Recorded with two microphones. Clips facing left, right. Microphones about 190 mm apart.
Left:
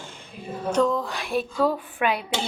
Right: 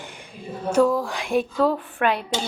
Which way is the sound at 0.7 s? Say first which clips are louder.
Right 3 dB; 5° right (ahead or behind).